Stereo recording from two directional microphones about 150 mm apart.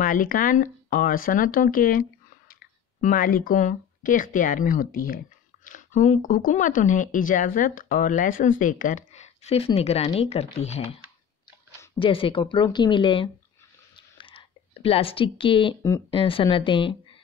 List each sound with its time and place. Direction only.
0.0 s speech: 70° left (ahead or behind)
5.7 s speech: 55° left (ahead or behind)
12.0 s speech: 35° left (ahead or behind)
13.9 s clicking: 35° left (ahead or behind)
16.1 s speech: 35° left (ahead or behind)